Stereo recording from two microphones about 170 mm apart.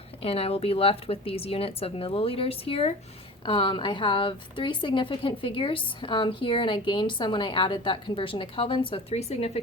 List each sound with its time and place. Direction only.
0.2 s a woman's voice: 35° left (ahead or behind)